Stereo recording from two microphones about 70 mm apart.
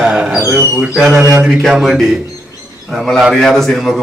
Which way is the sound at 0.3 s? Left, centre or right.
Right.